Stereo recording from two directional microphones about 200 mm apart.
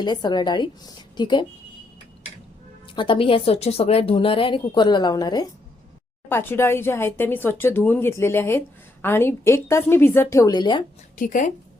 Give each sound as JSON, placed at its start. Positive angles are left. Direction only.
{"t": 0.0, "sound": "speech", "side_deg": 20}
{"t": 2.8, "sound": "speech", "side_deg": 25}
{"t": 11.2, "sound": "speech", "side_deg": 40}